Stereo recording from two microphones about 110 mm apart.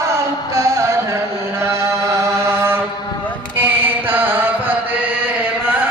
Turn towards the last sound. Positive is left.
turn(degrees=-15)  # may be behind; listen again after turning